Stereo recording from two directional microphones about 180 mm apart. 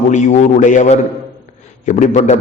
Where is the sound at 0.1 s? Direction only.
40° left (ahead or behind).